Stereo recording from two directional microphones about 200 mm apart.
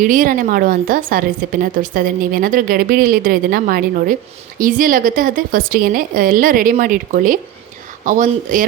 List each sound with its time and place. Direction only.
0.0 s a woman's voice: 40° right (ahead or behind)